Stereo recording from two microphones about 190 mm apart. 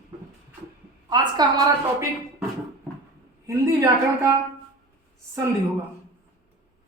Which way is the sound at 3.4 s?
15° right (ahead or behind).